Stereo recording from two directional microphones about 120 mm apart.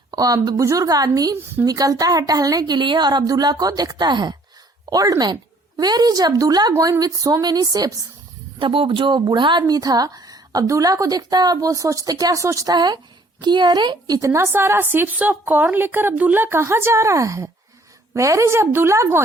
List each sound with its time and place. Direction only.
0.1 s a woman's voice: 30° right (ahead or behind)
8.5 s a woman's voice: 45° right (ahead or behind)
14.2 s a woman's voice: 25° right (ahead or behind)